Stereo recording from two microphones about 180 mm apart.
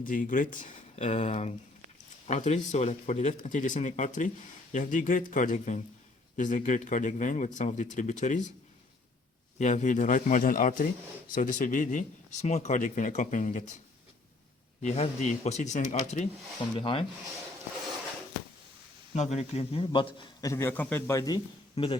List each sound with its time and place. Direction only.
0.0 s speech: 45° left (ahead or behind)
9.6 s speech: 40° left (ahead or behind)
14.8 s speech: 40° left (ahead or behind)
16.7 s a man's voice: 30° left (ahead or behind)
19.1 s a man's voice: 40° left (ahead or behind)